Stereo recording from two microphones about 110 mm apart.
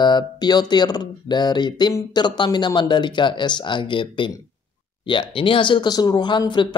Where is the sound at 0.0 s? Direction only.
40° left (ahead or behind).